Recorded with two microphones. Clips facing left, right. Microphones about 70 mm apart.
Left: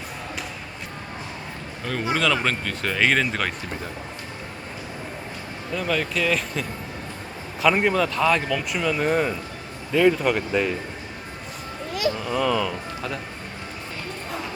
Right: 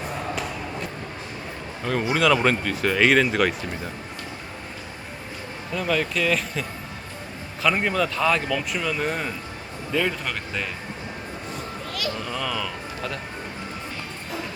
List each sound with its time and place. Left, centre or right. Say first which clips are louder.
1.8 s speech: right 2 dB; centre
5.7 s speech: right 1 dB; centre
11.9 s speech: left 6 dB; left
12.2 s speech: left 6 dB; centre